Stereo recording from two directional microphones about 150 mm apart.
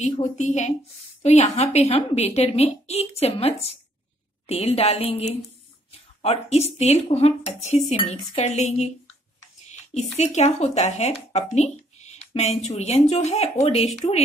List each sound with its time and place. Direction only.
0.0 s speech: 50° left (ahead or behind)